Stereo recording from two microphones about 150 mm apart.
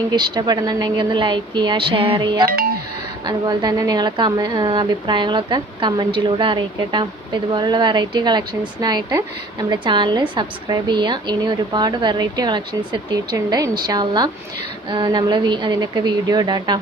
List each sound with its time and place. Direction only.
0.1 s speech: 25° right (ahead or behind)